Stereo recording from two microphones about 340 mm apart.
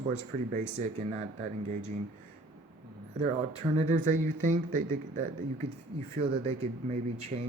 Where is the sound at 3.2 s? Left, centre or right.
Centre.